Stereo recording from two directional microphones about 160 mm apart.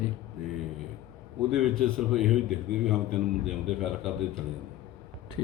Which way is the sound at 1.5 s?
Centre (ahead or behind).